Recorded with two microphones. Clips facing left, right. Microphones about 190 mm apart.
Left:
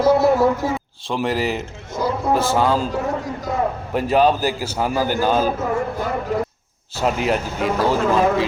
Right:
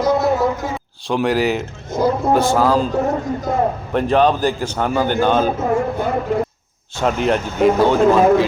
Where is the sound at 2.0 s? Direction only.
45° right (ahead or behind).